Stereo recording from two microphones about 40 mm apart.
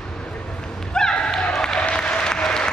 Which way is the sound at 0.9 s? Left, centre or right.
Centre.